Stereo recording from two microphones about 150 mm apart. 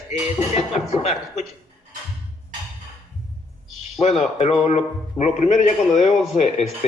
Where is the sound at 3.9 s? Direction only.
45° left (ahead or behind).